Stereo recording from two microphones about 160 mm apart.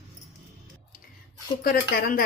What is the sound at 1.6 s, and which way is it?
Speech, 65° left (ahead or behind).